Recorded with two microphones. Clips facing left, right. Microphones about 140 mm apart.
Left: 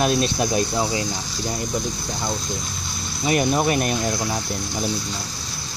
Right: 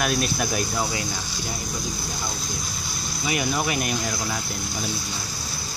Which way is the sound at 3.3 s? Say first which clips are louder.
Left 6 dB; 40° left (ahead or behind).